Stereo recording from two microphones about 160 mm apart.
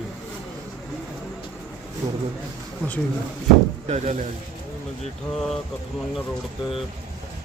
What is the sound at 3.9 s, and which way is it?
Speech, 45° right (ahead or behind).